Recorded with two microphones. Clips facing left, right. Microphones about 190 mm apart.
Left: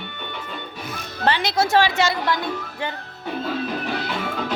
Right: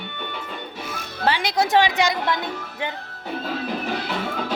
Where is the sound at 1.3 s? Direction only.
10° right (ahead or behind).